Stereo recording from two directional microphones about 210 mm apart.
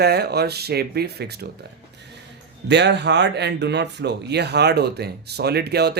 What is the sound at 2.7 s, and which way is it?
Speech, 55° right (ahead or behind).